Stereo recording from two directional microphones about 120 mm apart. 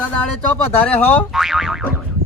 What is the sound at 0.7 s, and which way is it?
Speech, 15° left (ahead or behind).